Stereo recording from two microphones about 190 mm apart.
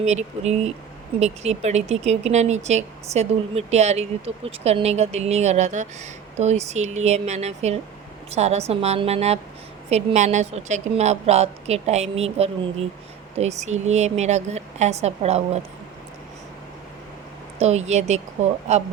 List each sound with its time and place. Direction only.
0.0 s speech: 35° right (ahead or behind)
17.6 s speech: 35° right (ahead or behind)